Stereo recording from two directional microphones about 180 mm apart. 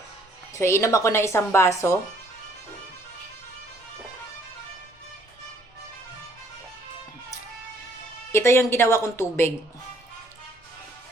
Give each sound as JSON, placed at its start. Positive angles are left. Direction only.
{"t": 0.5, "sound": "a woman's voice", "side_deg": 15}
{"t": 8.3, "sound": "a woman's voice", "side_deg": 15}